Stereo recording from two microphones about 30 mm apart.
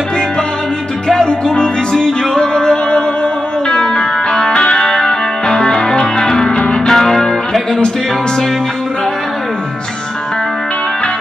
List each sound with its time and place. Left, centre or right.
1.0 s music: centre
6.9 s music: centre